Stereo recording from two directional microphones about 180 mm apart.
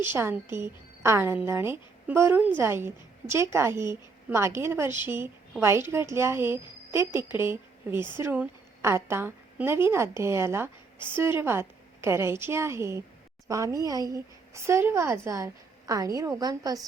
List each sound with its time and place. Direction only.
0.1 s a woman's voice: 10° right (ahead or behind)